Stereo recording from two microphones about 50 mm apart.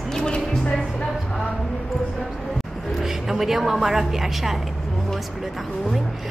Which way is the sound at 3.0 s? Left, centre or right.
Centre.